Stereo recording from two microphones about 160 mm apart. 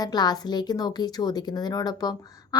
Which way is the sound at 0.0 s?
25° left (ahead or behind).